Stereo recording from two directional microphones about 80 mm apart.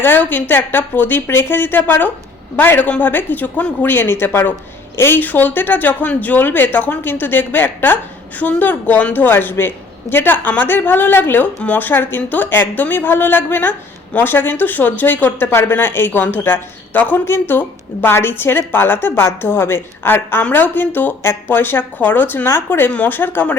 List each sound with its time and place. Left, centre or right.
0.0 s a woman's voice: left